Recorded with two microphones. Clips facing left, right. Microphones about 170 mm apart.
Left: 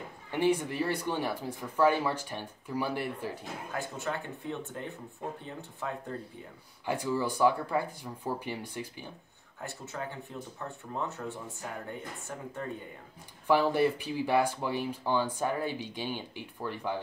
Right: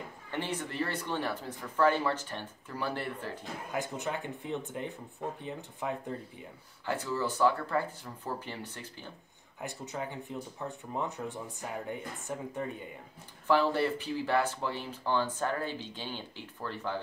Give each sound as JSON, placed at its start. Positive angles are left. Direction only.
{"t": 0.3, "sound": "speech", "side_deg": 10}
{"t": 3.7, "sound": "speech", "side_deg": -20}
{"t": 6.9, "sound": "speech", "side_deg": 15}
{"t": 9.6, "sound": "speech", "side_deg": -15}
{"t": 13.5, "sound": "speech", "side_deg": 15}